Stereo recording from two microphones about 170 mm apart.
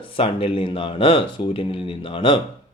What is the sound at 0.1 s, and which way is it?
Speech, 30° left (ahead or behind).